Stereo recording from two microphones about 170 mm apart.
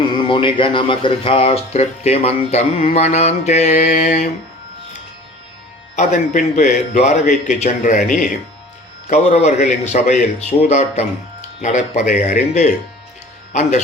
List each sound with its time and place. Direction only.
0.2 s a man's voice: 30° left (ahead or behind); by 4.3 s 50° left (ahead or behind)
6.0 s a man's voice: 45° left (ahead or behind)